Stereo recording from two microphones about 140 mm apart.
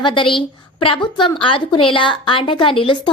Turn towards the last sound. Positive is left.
turn(degrees=40)  # may be behind; listen again after turning